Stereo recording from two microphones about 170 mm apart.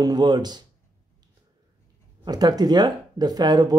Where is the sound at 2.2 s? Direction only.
25° right (ahead or behind).